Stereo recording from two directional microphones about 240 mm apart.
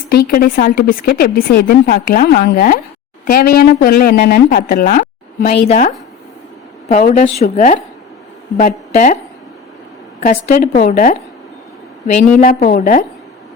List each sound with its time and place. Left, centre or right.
0.1 s a woman's voice: left
7.1 s a woman's voice: left
10.2 s a woman's voice: left
12.4 s a woman's voice: left